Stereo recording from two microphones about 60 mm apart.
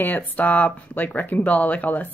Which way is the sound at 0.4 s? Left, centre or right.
Left.